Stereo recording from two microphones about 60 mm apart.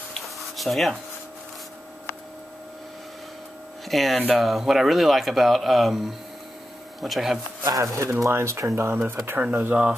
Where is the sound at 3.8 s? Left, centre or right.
Centre.